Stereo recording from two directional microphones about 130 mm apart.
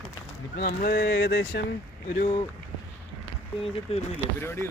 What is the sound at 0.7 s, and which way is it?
Speech, 90° left.